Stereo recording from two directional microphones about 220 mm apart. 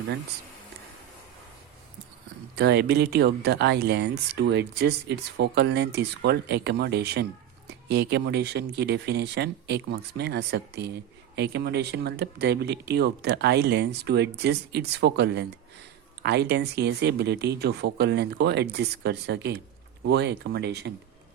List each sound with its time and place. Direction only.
2.6 s speech: 50° right (ahead or behind)